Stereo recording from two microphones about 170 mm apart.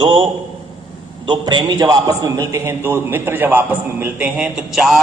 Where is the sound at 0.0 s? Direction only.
30° right (ahead or behind).